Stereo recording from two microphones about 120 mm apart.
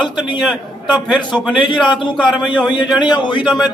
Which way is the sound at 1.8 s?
40° left (ahead or behind).